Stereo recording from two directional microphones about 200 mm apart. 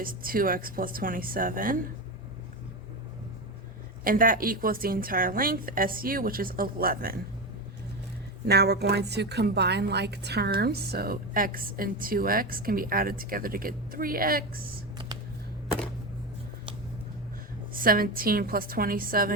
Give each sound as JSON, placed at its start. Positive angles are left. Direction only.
{"t": 0.0, "sound": "a woman's voice", "side_deg": -45}
{"t": 4.0, "sound": "a woman's voice", "side_deg": -45}
{"t": 8.4, "sound": "a woman's voice", "side_deg": -55}
{"t": 17.7, "sound": "a woman's voice", "side_deg": -45}